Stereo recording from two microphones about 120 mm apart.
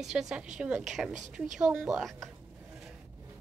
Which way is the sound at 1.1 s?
90° right.